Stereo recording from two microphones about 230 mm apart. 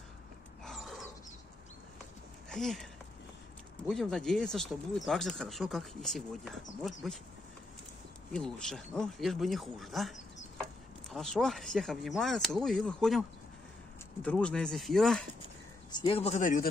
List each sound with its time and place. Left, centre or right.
0.7 s a sound: centre
2.5 s speech: centre
8.3 s speech: centre
14.2 s speech: centre
15.9 s a man's voice: left